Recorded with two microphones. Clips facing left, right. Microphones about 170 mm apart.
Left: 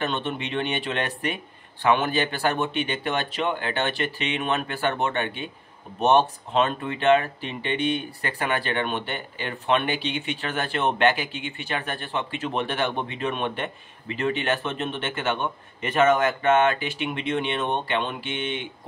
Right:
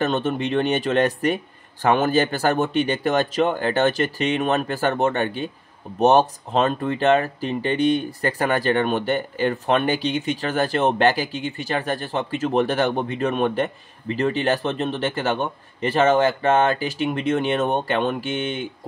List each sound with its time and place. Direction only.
0.0 s speech: 45° right (ahead or behind)